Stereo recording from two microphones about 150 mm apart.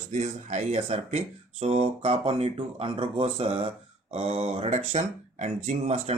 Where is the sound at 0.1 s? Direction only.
50° right (ahead or behind).